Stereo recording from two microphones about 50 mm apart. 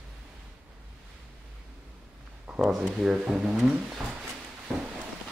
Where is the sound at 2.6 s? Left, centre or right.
Centre.